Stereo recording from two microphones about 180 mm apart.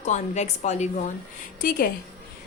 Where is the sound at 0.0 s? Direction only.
40° left (ahead or behind).